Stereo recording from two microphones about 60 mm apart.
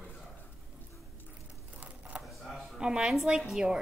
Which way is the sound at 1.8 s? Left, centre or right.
Right.